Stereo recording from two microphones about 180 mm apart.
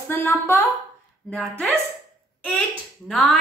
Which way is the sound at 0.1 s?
10° left (ahead or behind).